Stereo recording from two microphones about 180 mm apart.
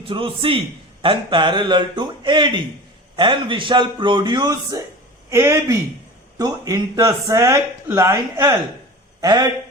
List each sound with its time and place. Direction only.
0.0 s a man's voice: 30° right (ahead or behind)